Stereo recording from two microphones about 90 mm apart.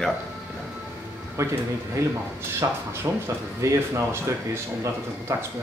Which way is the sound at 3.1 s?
25° right (ahead or behind).